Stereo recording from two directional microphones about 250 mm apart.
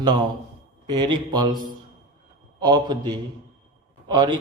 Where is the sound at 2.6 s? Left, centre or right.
Centre.